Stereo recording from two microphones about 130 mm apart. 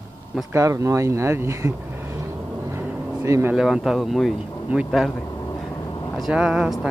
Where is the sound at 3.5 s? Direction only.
5° right (ahead or behind).